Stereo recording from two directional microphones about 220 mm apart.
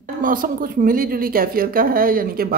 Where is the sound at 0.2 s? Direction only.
40° right (ahead or behind).